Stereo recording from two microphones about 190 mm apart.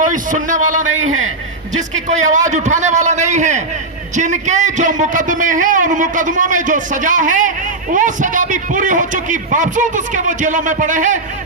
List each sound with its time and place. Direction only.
0.0 s a man's voice: 45° right (ahead or behind)